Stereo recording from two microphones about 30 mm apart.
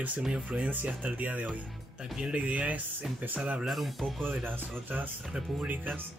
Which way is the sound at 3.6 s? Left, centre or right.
Centre.